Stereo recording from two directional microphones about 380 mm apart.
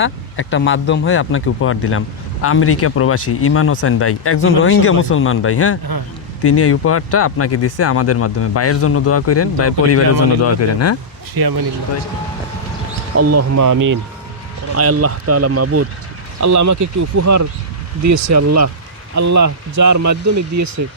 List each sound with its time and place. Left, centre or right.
0.0 s speech: left
11.3 s speech: right
13.1 s speech: right
14.8 s speech: right